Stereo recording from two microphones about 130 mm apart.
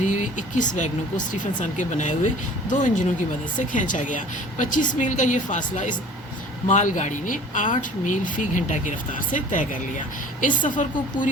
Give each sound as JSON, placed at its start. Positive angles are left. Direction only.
{"t": 0.0, "sound": "speech", "side_deg": 75}
{"t": 3.7, "sound": "a woman's voice", "side_deg": 80}